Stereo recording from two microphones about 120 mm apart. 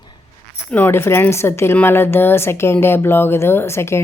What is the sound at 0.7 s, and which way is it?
A woman's voice, 15° left (ahead or behind).